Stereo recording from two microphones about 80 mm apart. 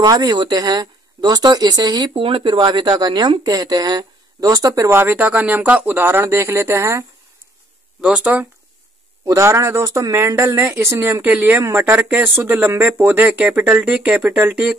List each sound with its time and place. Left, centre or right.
0.0 s speech: right
4.8 s speech: right
8.0 s speech: centre
9.2 s speech: right; by 14.6 s centre